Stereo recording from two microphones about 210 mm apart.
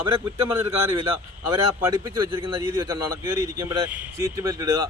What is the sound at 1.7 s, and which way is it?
Speech, 15° right (ahead or behind).